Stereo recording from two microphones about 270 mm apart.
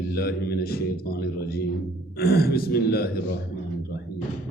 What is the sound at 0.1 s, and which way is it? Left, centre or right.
Speech, left.